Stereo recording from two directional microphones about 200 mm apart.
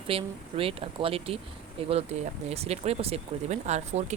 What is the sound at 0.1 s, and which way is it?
Speech, 30° right (ahead or behind).